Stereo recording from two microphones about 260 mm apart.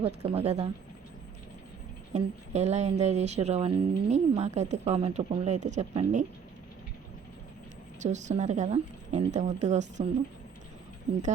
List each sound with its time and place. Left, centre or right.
0.0 s speech: right
2.1 s speech: right
7.9 s speech: right